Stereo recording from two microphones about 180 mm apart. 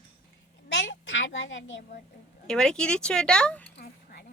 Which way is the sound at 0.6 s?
80° left.